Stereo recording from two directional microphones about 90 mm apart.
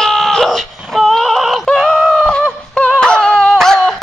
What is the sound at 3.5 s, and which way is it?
Music, 5° left (ahead or behind).